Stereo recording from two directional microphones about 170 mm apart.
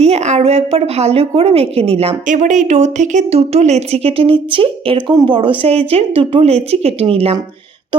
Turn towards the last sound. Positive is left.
turn(degrees=-35)  # may be behind; listen again after turning